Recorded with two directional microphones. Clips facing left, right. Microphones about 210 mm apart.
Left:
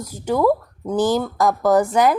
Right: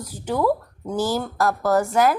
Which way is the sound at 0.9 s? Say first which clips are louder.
Left 5 dB; 15° left (ahead or behind).